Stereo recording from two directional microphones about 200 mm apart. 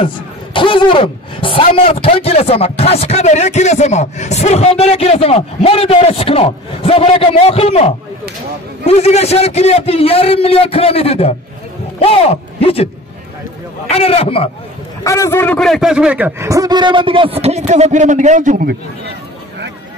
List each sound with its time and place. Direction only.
0.0 s a man's voice: 25° left (ahead or behind)
13.8 s a man's voice: 30° left (ahead or behind)
15.0 s a man's voice: 15° left (ahead or behind); by 18.8 s 40° right (ahead or behind)